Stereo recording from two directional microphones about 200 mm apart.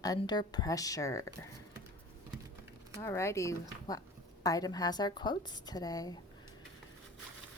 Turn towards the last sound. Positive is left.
turn(degrees=20)  # may be behind; listen again after turning